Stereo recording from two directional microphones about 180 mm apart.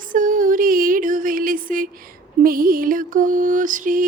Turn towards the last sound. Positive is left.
turn(degrees=-45)  # may be behind; listen again after turning